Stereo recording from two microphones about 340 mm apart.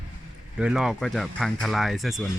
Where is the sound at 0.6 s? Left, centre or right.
Centre.